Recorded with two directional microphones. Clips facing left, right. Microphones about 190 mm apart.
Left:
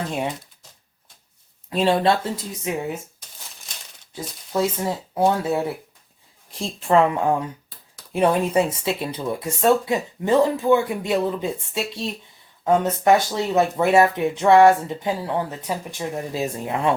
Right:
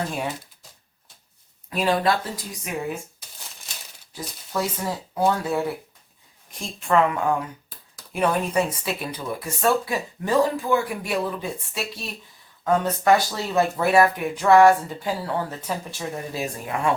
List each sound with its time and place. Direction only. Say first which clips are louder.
1.7 s speech: left 3 dB; 25° left (ahead or behind)
4.5 s speech: left 4 dB; 25° left (ahead or behind)